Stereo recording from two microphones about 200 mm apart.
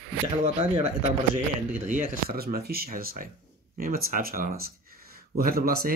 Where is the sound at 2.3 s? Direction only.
50° right (ahead or behind).